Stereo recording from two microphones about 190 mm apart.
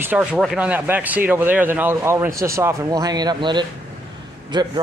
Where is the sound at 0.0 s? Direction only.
10° right (ahead or behind).